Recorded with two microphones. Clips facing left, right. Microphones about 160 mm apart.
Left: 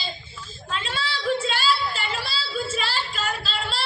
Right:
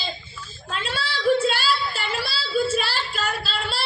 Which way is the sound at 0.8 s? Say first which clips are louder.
Right 4 dB; 40° right (ahead or behind).